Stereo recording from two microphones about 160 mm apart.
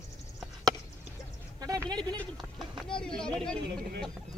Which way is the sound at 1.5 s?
25° right (ahead or behind).